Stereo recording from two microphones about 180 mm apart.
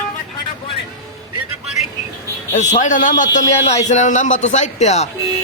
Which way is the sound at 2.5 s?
40° left (ahead or behind).